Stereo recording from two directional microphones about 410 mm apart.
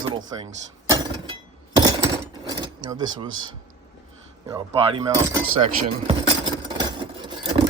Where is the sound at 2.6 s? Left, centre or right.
Centre.